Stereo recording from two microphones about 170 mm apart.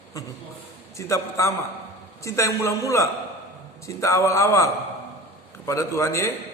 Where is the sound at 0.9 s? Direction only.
15° left (ahead or behind).